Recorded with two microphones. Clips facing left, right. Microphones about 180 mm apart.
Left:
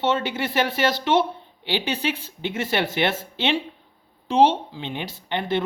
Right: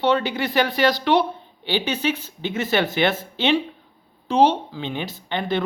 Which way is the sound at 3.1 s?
30° left (ahead or behind).